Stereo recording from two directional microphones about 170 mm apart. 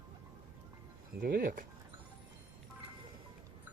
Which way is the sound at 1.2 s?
55° right (ahead or behind).